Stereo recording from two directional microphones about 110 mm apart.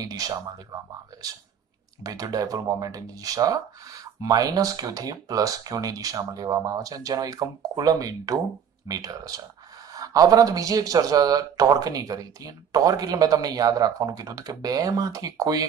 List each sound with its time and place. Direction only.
0.0 s speech: 35° right (ahead or behind)